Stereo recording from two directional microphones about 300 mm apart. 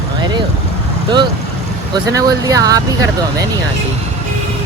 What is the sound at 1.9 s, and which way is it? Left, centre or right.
Speech, centre.